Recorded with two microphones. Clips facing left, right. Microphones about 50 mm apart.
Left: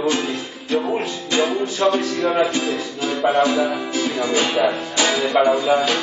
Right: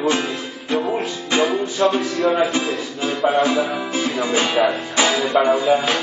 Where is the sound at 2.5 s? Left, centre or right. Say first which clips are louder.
Even; right.